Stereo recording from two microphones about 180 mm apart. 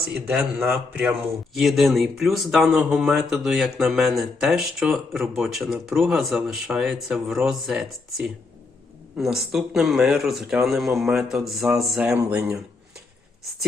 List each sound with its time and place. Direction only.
0.1 s speech: 5° right (ahead or behind)